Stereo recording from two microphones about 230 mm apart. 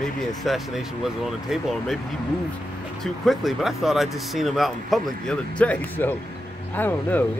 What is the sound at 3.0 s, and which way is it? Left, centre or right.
Speech, centre.